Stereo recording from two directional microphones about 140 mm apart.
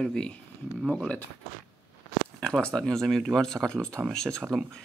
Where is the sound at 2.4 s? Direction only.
5° left (ahead or behind).